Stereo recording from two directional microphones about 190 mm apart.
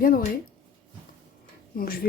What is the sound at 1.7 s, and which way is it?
Speech, 50° left (ahead or behind).